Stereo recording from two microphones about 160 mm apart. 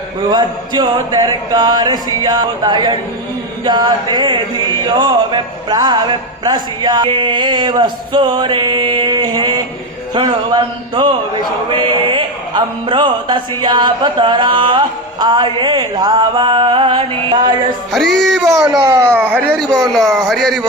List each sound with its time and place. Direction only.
0.3 s speech: 25° right (ahead or behind)
18.0 s music: 90° right
18.3 s speech: centre (ahead or behind)
18.9 s speech: 15° right (ahead or behind)
19.7 s speech: centre (ahead or behind)